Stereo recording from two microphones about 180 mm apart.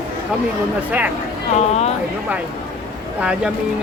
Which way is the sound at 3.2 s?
5° right (ahead or behind).